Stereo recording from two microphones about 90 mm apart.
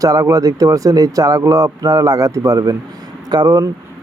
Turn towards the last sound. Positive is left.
turn(degrees=-45)  # may be behind; listen again after turning